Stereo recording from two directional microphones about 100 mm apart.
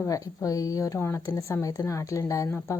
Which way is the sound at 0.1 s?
35° left (ahead or behind).